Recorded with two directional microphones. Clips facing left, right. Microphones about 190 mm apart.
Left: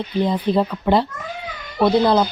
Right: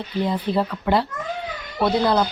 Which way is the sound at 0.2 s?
20° left (ahead or behind).